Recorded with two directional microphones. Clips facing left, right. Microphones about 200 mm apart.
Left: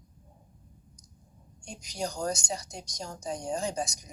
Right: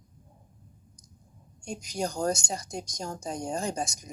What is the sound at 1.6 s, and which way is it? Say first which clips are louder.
Speech: right 3 dB; 50° right (ahead or behind).